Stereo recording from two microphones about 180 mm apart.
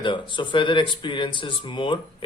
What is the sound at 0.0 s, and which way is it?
Speech, 25° left (ahead or behind).